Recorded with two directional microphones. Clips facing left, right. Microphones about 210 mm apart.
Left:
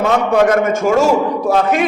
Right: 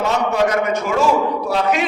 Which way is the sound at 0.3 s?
50° left (ahead or behind).